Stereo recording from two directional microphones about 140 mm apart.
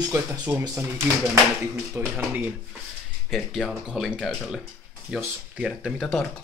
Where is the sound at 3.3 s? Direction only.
Centre (ahead or behind).